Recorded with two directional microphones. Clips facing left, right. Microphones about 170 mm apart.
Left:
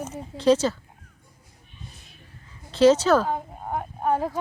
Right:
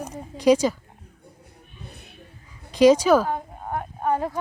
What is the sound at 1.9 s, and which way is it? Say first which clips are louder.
Music: right 6 dB; 60° right (ahead or behind).